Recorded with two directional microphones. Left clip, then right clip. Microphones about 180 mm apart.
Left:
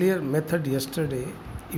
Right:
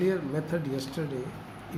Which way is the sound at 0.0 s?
65° left (ahead or behind).